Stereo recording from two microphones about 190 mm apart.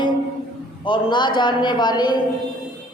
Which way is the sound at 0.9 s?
25° left (ahead or behind).